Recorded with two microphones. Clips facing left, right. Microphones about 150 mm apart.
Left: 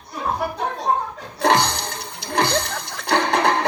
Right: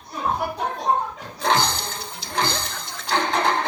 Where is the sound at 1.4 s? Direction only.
70° left (ahead or behind).